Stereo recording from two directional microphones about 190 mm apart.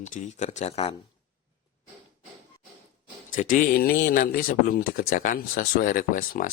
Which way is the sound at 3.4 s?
45° left (ahead or behind).